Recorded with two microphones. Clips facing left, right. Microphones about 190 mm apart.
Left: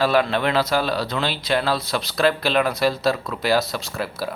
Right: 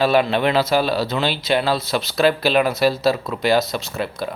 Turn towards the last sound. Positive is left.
turn(degrees=5)  # may be behind; listen again after turning